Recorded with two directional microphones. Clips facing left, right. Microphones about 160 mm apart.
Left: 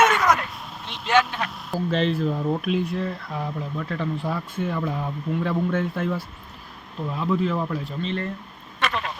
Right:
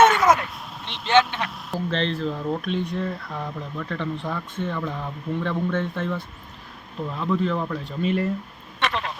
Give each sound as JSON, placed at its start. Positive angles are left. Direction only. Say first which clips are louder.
{"t": 0.0, "sound": "a sound", "louder": "right 3 dB", "side_deg": -30}
{"t": 0.9, "sound": "speech", "louder": "right 2 dB", "side_deg": 0}
{"t": 8.0, "sound": "speech", "louder": "right 7 dB", "side_deg": -10}